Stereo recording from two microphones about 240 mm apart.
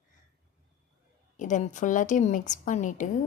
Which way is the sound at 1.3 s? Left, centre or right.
Left.